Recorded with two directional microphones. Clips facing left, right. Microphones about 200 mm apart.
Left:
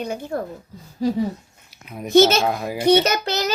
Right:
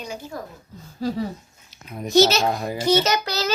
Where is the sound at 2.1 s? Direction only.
55° left (ahead or behind).